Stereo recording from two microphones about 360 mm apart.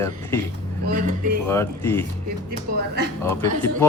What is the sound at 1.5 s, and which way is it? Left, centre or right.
Speech, centre.